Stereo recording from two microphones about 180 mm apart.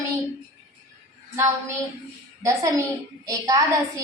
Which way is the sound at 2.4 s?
15° right (ahead or behind).